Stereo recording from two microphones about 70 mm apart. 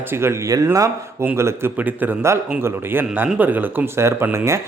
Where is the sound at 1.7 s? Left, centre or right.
Right.